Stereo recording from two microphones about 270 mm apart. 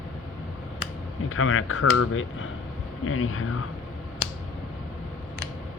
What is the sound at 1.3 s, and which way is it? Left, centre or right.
Speech, left.